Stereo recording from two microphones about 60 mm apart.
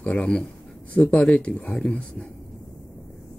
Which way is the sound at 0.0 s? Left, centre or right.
Centre.